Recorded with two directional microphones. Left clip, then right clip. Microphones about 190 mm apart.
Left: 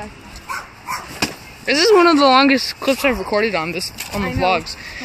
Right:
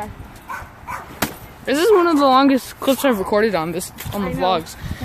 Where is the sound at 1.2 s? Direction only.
Centre (ahead or behind).